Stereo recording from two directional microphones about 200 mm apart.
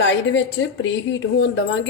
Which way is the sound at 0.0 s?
65° left (ahead or behind).